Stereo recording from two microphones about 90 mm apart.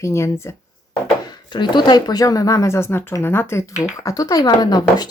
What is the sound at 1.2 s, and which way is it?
Speech, 55° left (ahead or behind).